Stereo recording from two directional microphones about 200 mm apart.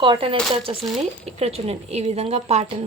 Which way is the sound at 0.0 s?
25° right (ahead or behind).